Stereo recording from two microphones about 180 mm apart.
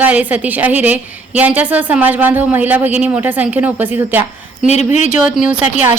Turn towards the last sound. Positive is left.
turn(degrees=-5)  # may be behind; listen again after turning